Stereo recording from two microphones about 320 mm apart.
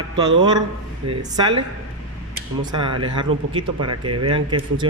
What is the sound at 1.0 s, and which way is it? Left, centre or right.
Speech, centre.